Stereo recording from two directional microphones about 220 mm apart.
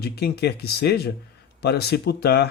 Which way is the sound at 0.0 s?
45° left (ahead or behind).